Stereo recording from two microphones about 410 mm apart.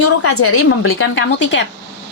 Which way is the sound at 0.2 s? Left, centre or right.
Left.